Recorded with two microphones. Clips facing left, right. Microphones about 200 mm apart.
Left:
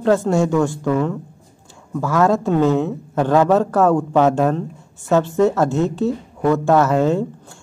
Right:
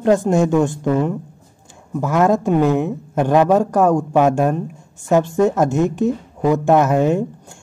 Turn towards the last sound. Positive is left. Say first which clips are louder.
# right 1 dB
turn(degrees=-15)  # may be behind; listen again after turning